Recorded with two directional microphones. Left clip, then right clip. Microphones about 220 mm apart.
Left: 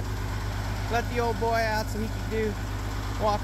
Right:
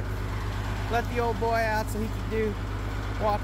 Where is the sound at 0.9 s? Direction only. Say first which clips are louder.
Even; 5° left (ahead or behind).